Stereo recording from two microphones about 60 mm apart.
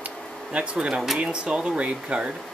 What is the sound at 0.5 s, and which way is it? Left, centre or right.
Speech, centre.